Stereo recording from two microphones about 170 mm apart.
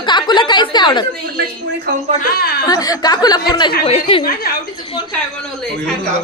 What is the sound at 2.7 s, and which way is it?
Speech, 20° left (ahead or behind).